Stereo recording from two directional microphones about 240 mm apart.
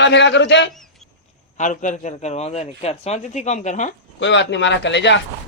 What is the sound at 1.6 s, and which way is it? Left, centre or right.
A man's voice, left.